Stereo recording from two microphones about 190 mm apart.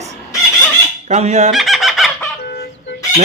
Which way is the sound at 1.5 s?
Centre (ahead or behind).